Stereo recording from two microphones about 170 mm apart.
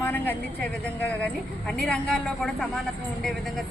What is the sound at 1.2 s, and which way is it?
Speech, 5° left (ahead or behind).